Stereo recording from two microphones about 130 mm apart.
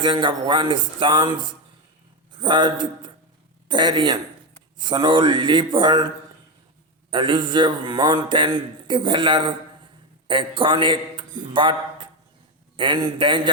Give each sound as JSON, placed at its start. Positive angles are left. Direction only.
{"t": 0.0, "sound": "speech", "side_deg": -40}
{"t": 7.1, "sound": "a man's voice", "side_deg": -40}